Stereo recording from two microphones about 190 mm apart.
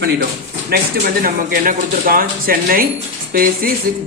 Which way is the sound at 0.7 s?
55° right (ahead or behind).